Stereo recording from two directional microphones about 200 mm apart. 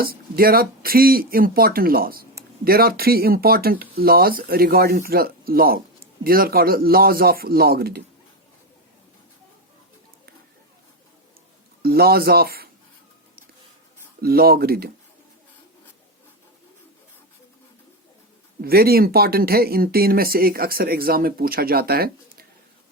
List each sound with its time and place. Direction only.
0.0 s speech: 50° right (ahead or behind)
11.8 s speech: 50° right (ahead or behind)
14.2 s speech: 50° right (ahead or behind)
18.6 s speech: 50° right (ahead or behind)